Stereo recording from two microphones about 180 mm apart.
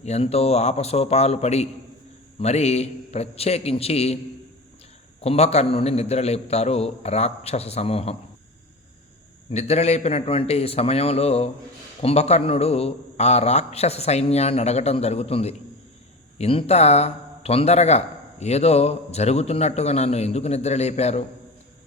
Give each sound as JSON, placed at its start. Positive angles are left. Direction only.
{"t": 0.0, "sound": "a man's voice", "side_deg": 35}
{"t": 5.2, "sound": "a man's voice", "side_deg": 35}
{"t": 9.5, "sound": "a man's voice", "side_deg": 35}